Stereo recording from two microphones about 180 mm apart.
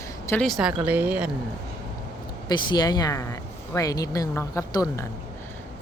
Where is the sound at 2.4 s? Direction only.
25° left (ahead or behind).